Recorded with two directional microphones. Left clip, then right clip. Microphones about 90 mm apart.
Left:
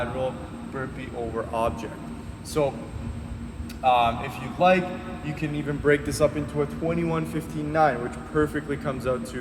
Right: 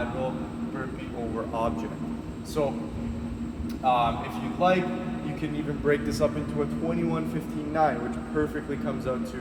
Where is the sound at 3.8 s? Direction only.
35° left (ahead or behind).